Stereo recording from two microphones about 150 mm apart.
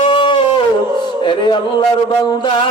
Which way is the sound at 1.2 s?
30° left (ahead or behind).